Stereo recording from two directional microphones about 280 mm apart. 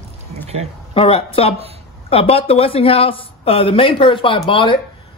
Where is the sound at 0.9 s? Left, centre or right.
Left.